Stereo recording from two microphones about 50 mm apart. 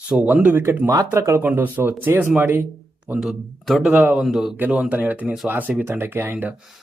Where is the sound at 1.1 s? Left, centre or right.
Right.